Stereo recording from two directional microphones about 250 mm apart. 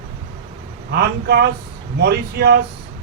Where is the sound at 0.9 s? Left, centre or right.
Right.